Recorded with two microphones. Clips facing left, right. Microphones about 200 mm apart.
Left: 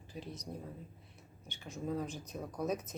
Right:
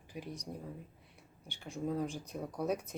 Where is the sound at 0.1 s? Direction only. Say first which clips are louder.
Right 2 dB; 15° right (ahead or behind).